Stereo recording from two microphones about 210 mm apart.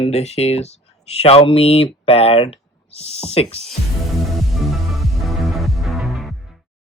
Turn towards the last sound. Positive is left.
turn(degrees=0)  # may be behind; listen again after turning